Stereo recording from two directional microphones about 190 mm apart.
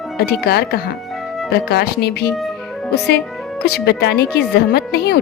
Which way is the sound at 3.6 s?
60° left (ahead or behind).